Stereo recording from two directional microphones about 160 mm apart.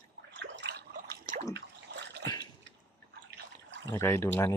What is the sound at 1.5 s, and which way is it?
Water, 90° right.